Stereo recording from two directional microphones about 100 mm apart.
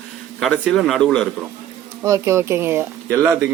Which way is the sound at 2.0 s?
30° right (ahead or behind).